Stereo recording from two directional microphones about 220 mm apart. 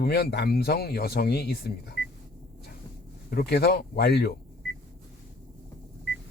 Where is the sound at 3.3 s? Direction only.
45° left (ahead or behind).